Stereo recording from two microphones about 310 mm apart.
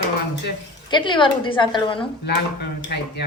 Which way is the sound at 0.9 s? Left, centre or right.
Centre.